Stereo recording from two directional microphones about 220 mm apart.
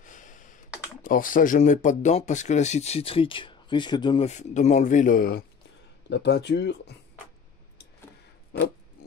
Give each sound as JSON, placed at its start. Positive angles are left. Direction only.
{"t": 0.0, "sound": "a sound", "side_deg": 35}
{"t": 1.0, "sound": "speech", "side_deg": 40}
{"t": 4.3, "sound": "speech", "side_deg": 30}